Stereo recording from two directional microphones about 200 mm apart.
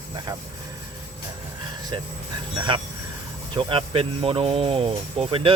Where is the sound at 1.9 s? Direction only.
25° right (ahead or behind).